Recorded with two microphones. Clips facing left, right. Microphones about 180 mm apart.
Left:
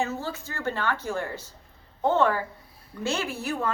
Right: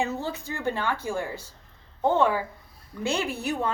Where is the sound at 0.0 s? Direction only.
15° right (ahead or behind).